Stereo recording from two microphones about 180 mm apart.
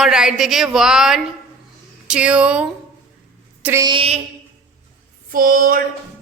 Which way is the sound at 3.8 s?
30° right (ahead or behind).